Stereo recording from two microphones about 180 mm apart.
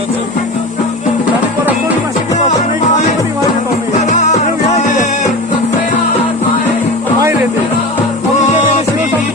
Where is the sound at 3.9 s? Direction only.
45° left (ahead or behind).